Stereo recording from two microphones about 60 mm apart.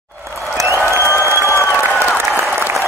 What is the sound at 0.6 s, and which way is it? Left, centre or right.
Applause, right.